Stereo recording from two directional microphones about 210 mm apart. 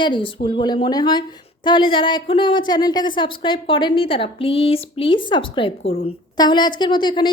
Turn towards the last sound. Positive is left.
turn(degrees=20)  # may be behind; listen again after turning